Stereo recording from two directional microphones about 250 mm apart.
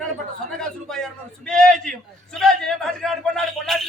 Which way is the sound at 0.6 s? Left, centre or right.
Centre.